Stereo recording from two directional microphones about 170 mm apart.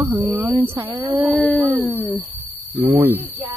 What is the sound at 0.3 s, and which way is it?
Speech, 10° right (ahead or behind).